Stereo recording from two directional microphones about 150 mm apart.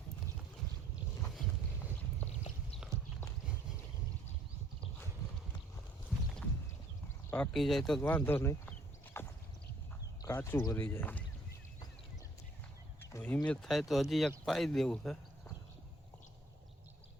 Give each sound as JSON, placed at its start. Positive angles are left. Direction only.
{"t": 7.3, "sound": "speech", "side_deg": 10}
{"t": 8.0, "sound": "speech", "side_deg": 15}
{"t": 9.2, "sound": "a sound", "side_deg": 15}
{"t": 10.2, "sound": "speech", "side_deg": 20}
{"t": 13.0, "sound": "a sound", "side_deg": 20}
{"t": 13.2, "sound": "speech", "side_deg": 10}